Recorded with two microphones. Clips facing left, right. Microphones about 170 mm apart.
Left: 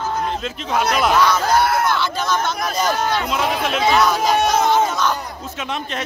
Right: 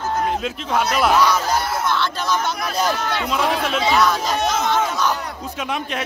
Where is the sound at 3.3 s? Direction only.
Centre (ahead or behind).